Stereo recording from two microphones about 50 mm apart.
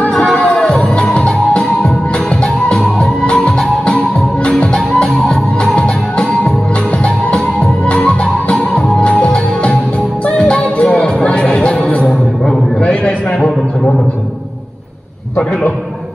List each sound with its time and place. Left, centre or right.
0.0 s music: centre
5.8 s music: left
7.6 s music: left
12.8 s a sound: left